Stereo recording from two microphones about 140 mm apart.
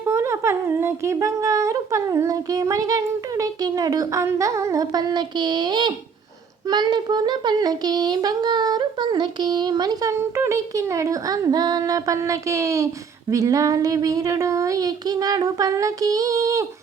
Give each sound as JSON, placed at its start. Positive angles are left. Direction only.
{"t": 0.0, "sound": "speech", "side_deg": -20}